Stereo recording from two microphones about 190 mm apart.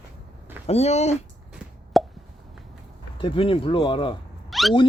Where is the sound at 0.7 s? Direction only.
35° left (ahead or behind).